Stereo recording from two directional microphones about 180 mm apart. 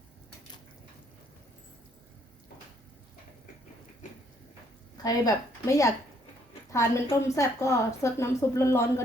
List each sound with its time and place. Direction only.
5.0 s a woman's voice: 20° left (ahead or behind)